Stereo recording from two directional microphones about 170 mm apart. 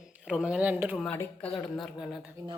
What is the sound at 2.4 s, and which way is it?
Speech, 20° right (ahead or behind).